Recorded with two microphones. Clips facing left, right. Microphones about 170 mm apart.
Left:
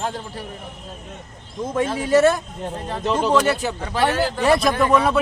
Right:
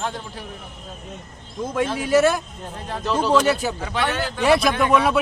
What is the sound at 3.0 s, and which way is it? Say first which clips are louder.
Speech: even; 20° left (ahead or behind).